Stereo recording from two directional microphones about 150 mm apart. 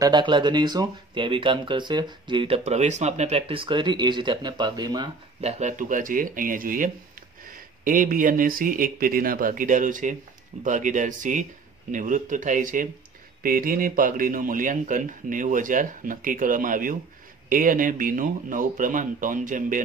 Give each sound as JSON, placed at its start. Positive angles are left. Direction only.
{"t": 0.0, "sound": "speech", "side_deg": -30}
{"t": 5.4, "sound": "speech", "side_deg": -50}